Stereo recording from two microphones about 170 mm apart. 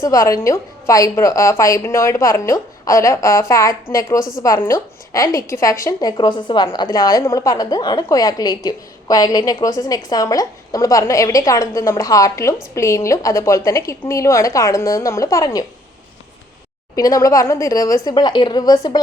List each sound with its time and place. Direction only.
0.0 s a woman's voice: 20° left (ahead or behind)
16.9 s a woman's voice: 20° left (ahead or behind)